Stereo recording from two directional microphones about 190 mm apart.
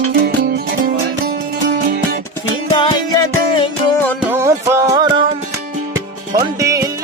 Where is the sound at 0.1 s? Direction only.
50° right (ahead or behind).